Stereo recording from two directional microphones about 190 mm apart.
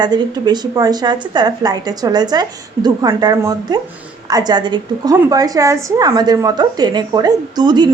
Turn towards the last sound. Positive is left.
turn(degrees=-20)  # may be behind; listen again after turning